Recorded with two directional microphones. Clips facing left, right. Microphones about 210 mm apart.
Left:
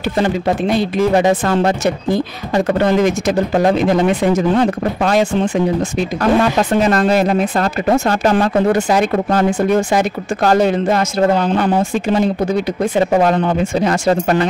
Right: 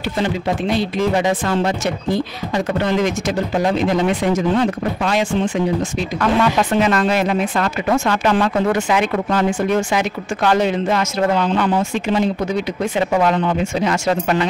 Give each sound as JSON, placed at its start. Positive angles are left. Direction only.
{"t": 0.2, "sound": "speech", "side_deg": 50}
{"t": 5.4, "sound": "speech", "side_deg": 60}
{"t": 6.2, "sound": "speech", "side_deg": 40}